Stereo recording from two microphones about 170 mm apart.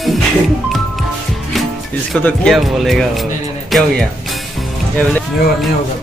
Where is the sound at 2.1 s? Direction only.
Centre (ahead or behind).